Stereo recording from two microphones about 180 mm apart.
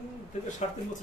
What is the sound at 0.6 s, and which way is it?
Speech, 40° left (ahead or behind).